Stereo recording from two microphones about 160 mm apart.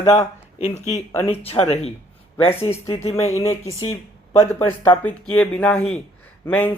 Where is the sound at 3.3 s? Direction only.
20° left (ahead or behind).